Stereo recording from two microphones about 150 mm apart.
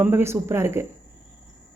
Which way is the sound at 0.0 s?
15° right (ahead or behind).